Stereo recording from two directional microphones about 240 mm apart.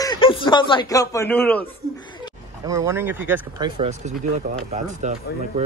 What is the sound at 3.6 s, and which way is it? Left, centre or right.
Speech, right.